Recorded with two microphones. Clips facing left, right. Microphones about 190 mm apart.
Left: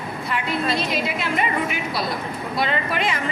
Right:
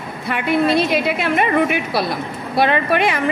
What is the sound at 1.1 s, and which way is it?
A woman's voice, 65° right (ahead or behind).